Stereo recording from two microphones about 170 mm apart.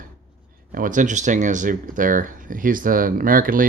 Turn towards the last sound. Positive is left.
turn(degrees=-55)  # may be behind; listen again after turning